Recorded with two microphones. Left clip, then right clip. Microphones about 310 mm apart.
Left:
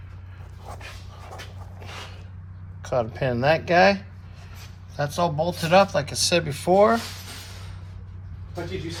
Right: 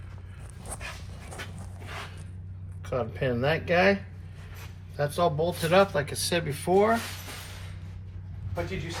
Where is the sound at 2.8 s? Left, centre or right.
Centre.